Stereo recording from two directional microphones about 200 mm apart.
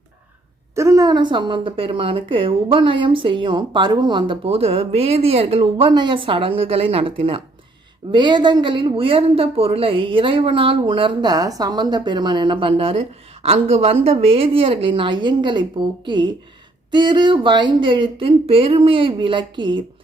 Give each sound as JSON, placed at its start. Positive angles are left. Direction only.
{"t": 0.8, "sound": "a woman's voice", "side_deg": -15}